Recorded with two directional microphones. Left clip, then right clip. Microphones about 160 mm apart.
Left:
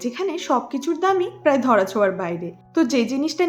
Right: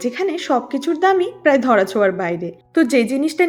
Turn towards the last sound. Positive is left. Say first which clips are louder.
# right 5 dB
turn(degrees=-20)  # may be behind; listen again after turning